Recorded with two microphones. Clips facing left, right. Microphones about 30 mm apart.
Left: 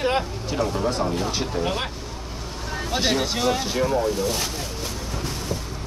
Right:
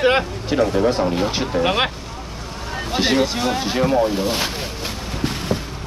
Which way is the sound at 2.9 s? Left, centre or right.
Right.